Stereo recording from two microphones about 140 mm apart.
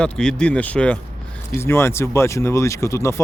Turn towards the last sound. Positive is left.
turn(degrees=20)  # may be behind; listen again after turning